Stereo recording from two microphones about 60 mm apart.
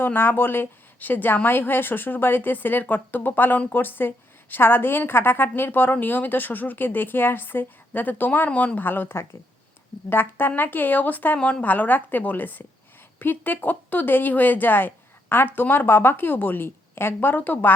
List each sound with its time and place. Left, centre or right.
0.0 s a woman's voice: left
11.3 s a woman's voice: centre
11.6 s a woman's voice: left